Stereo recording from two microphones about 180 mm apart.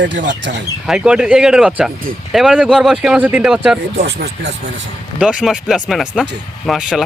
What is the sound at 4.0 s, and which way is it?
Speech, 75° right (ahead or behind).